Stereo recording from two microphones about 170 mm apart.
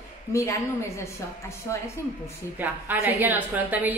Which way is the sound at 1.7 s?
15° left (ahead or behind).